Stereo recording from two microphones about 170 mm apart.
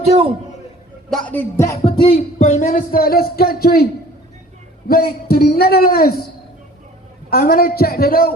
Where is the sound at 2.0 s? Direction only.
35° left (ahead or behind).